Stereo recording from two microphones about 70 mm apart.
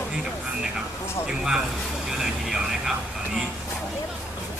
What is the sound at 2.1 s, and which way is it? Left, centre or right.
Vehicle, centre.